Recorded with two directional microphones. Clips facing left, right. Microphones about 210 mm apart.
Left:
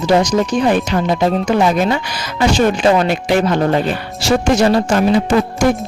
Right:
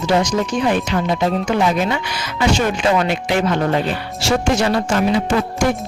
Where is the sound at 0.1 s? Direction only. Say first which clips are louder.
Left 4 dB; 40° left (ahead or behind).